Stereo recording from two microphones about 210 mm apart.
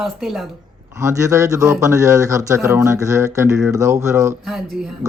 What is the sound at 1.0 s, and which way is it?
Speech, 15° right (ahead or behind).